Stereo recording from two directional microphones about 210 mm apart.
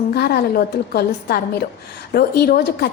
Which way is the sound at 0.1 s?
50° left (ahead or behind).